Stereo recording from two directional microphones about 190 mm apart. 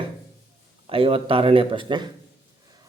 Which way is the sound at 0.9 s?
30° right (ahead or behind).